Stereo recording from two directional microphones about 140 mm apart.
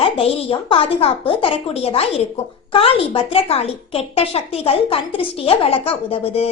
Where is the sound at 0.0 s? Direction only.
45° left (ahead or behind).